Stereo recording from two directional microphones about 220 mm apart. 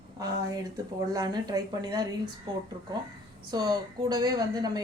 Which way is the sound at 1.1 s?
20° right (ahead or behind).